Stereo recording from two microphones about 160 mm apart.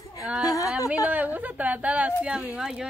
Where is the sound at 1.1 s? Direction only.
10° right (ahead or behind).